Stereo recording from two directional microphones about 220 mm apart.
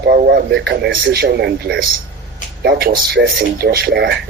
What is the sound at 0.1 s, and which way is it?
A man's voice, 45° right (ahead or behind).